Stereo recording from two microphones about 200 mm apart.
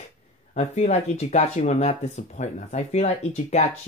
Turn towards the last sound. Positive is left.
turn(degrees=35)  # may be behind; listen again after turning